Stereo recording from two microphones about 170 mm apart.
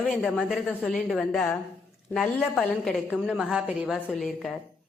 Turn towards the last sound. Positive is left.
turn(degrees=0)  # may be behind; listen again after turning